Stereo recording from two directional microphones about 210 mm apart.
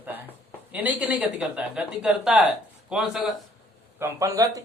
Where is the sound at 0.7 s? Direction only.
5° right (ahead or behind).